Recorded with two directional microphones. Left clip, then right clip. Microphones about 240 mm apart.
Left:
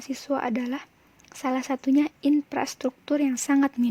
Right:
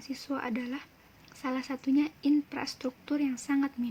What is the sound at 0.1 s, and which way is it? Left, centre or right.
Speech, left.